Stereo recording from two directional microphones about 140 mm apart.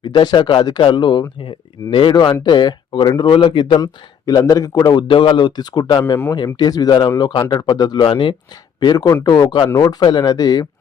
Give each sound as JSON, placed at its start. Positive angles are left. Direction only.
{"t": 0.0, "sound": "a man's voice", "side_deg": 30}